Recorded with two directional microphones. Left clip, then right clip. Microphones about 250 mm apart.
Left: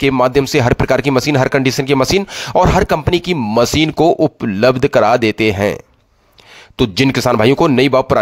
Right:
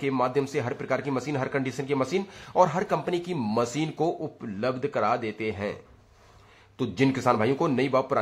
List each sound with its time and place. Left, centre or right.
0.0 s speech: left
6.8 s speech: left